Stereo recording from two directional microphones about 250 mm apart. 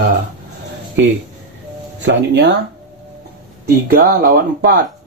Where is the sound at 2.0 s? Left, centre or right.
Right.